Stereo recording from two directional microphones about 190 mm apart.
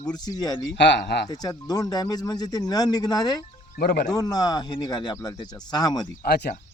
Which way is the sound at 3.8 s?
55° left (ahead or behind).